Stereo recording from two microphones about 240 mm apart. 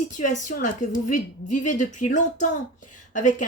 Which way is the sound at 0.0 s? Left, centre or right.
Left.